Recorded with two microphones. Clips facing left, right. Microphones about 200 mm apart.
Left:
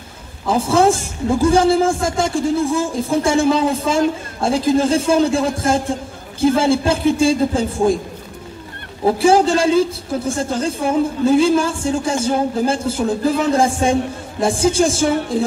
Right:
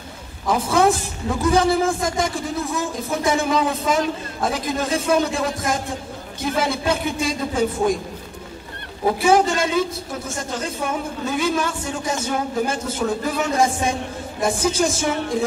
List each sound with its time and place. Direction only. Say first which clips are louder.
0.5 s a man's voice: left 3 dB; 30° left (ahead or behind)
9.0 s a woman's voice: left 4 dB; 30° left (ahead or behind)